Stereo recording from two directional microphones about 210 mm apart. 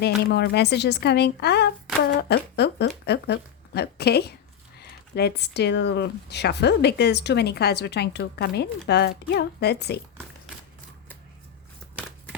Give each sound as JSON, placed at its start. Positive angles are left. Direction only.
{"t": 0.3, "sound": "speech", "side_deg": 50}
{"t": 2.3, "sound": "a sound", "side_deg": 50}
{"t": 4.8, "sound": "speech", "side_deg": 50}